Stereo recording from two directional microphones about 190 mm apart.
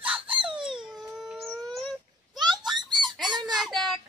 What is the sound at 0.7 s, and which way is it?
Dog, 5° right (ahead or behind).